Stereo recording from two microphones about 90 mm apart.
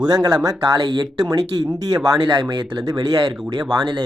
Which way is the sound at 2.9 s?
50° right (ahead or behind).